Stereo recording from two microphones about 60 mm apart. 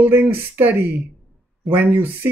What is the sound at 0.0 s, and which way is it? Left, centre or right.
Speech, right.